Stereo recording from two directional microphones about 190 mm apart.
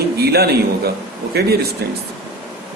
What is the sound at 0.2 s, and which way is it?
A man's voice, 55° right (ahead or behind).